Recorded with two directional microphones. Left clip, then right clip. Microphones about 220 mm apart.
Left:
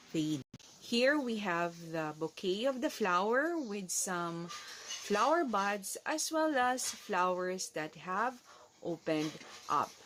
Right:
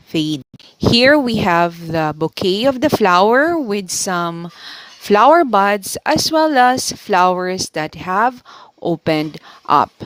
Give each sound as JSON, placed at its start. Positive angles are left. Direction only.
{"t": 0.1, "sound": "speech", "side_deg": -40}